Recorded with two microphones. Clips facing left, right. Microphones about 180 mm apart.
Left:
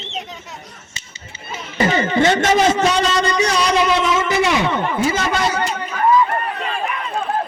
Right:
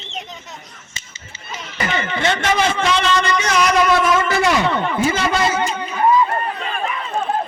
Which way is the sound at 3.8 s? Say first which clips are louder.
Right 1 dB; 20° left (ahead or behind).